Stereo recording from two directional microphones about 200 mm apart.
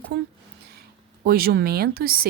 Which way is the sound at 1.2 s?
50° right (ahead or behind).